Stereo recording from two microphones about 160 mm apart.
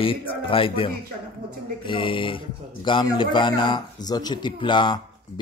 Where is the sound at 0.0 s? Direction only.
35° left (ahead or behind).